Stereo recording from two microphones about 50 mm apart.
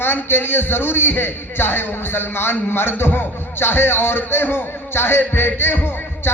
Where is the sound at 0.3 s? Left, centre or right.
Left.